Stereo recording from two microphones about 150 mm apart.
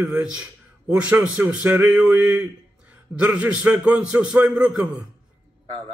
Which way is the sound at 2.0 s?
5° right (ahead or behind).